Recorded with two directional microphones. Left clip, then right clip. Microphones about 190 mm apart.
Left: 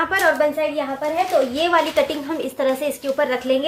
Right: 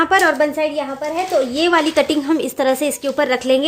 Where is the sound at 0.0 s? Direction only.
50° right (ahead or behind).